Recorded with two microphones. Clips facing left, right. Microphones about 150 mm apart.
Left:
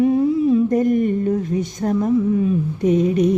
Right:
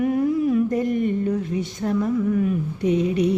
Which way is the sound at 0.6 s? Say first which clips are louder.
Left 5 dB; 45° left (ahead or behind).